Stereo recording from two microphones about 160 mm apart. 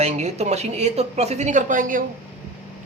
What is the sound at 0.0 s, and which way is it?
A woman's voice, 45° right (ahead or behind).